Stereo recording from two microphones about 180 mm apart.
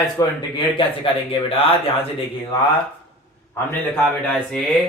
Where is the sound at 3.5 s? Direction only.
5° left (ahead or behind).